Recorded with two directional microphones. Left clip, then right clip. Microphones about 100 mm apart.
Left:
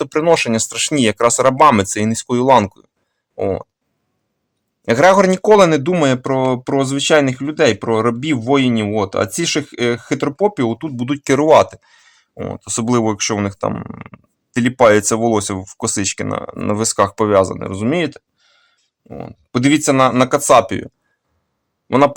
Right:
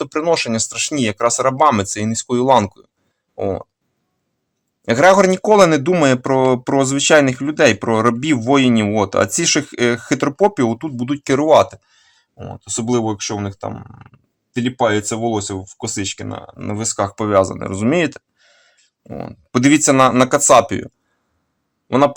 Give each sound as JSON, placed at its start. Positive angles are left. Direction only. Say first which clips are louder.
{"t": 0.0, "sound": "speech", "louder": "left 3 dB", "side_deg": 25}
{"t": 4.8, "sound": "speech", "louder": "even", "side_deg": 15}
{"t": 5.5, "sound": "speech", "louder": "even", "side_deg": 0}
{"t": 11.0, "sound": "speech", "louder": "left 2 dB", "side_deg": 20}
{"t": 12.4, "sound": "speech", "louder": "left 4 dB", "side_deg": 75}
{"t": 14.5, "sound": "speech", "louder": "left 6 dB", "side_deg": 90}
{"t": 17.1, "sound": "speech", "louder": "left 5 dB", "side_deg": 35}
{"t": 17.3, "sound": "speech", "louder": "even", "side_deg": 15}
{"t": 17.6, "sound": "speech", "louder": "right 1 dB", "side_deg": 0}